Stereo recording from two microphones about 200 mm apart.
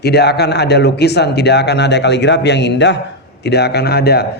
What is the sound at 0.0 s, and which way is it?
Speech, 55° left (ahead or behind).